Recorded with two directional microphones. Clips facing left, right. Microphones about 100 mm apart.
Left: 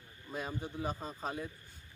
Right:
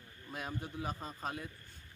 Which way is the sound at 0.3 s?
Centre (ahead or behind).